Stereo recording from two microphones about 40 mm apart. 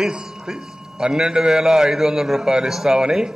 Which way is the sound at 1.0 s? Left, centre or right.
Centre.